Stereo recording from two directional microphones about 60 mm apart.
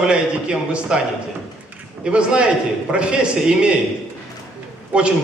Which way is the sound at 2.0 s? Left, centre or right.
Centre.